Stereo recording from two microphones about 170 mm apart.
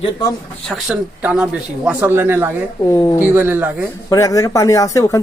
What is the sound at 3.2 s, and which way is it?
Speech, 10° right (ahead or behind).